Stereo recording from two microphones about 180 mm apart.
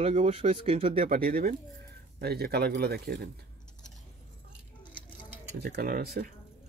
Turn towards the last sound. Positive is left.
turn(degrees=-55)  # may be behind; listen again after turning